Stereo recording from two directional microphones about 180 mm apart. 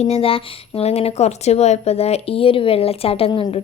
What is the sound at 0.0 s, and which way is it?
A woman's voice, 30° left (ahead or behind).